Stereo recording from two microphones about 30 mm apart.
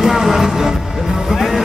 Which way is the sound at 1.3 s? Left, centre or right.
Centre.